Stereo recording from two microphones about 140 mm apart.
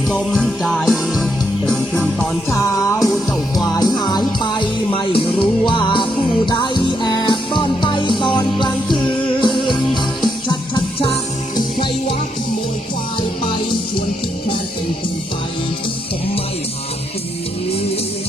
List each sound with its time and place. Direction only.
0.3 s music: centre (ahead or behind)
2.8 s music: 25° left (ahead or behind)